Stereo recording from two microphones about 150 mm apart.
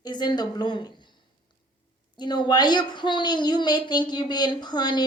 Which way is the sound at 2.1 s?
30° left (ahead or behind).